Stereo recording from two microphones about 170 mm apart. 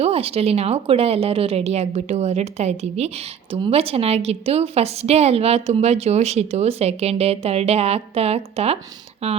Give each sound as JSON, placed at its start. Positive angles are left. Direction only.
{"t": 0.0, "sound": "a woman's voice", "side_deg": -35}